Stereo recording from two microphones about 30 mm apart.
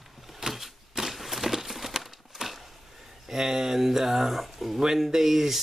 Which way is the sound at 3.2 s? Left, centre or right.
Centre.